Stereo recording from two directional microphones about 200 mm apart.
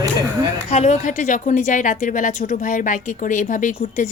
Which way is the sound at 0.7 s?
35° left (ahead or behind).